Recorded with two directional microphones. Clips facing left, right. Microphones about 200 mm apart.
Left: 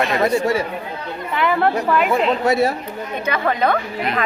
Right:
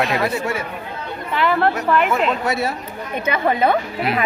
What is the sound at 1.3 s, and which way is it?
Speech, centre (ahead or behind).